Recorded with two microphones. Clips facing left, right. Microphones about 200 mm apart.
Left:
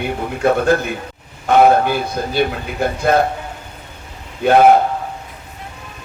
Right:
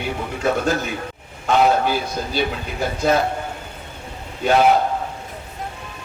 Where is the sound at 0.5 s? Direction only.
55° left (ahead or behind).